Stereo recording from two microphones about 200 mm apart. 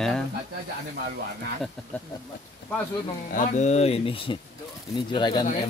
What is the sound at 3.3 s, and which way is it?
Speech, 40° left (ahead or behind).